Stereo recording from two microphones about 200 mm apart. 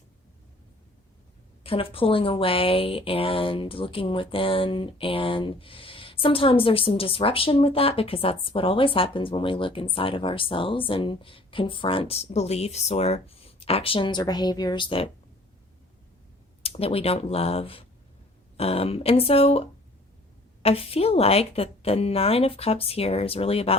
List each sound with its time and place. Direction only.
1.6 s a woman's voice: 30° left (ahead or behind)
16.6 s a woman's voice: 30° left (ahead or behind)